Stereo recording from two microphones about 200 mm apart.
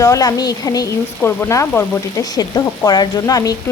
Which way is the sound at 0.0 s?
15° left (ahead or behind).